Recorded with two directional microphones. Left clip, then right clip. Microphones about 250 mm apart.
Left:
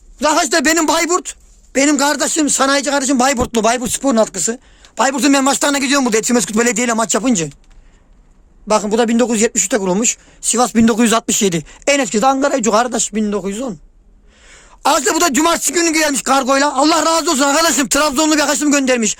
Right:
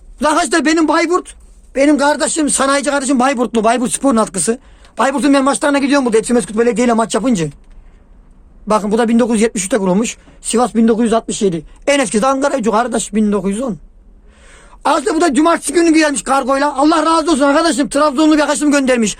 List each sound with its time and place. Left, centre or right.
0.2 s a man's voice: centre
0.6 s speech: left
0.9 s speech: left
3.8 s a man's voice: centre
4.0 s speech: centre
4.9 s a man's voice: centre
5.3 s speech: left
6.8 s speech: left; by 7.5 s centre
8.6 s a man's voice: centre; by 11.6 s left
11.9 s a man's voice: centre
14.4 s a sound: centre
15.0 s speech: left; by 19.1 s centre